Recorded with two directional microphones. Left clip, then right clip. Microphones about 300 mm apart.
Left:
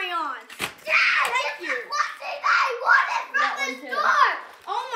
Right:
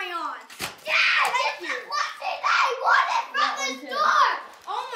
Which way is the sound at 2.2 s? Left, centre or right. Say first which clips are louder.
Even; right.